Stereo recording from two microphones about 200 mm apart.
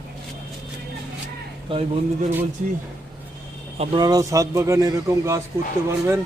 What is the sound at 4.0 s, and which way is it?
Speech, 20° right (ahead or behind).